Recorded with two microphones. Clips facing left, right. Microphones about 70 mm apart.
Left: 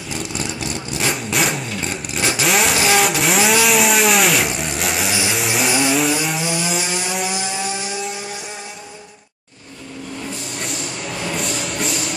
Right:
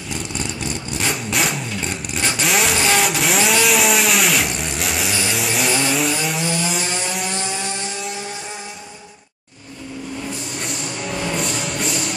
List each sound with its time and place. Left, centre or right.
0.1 s vehicle: centre
5.3 s chainsaw: centre
10.6 s a sound: centre